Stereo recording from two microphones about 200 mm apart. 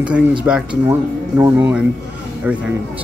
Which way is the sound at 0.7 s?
20° right (ahead or behind).